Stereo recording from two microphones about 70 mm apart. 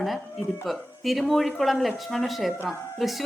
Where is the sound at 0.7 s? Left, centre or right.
Centre.